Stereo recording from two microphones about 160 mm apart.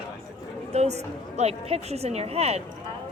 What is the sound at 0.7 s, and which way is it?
A woman's voice, 45° right (ahead or behind).